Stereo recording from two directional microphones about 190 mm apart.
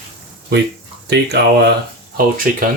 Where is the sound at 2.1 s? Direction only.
50° right (ahead or behind).